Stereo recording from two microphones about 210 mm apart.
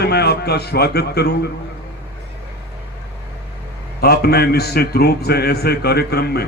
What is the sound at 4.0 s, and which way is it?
Speech, 50° left (ahead or behind).